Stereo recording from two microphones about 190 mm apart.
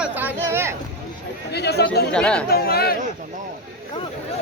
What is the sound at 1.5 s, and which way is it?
Speech, 60° left (ahead or behind).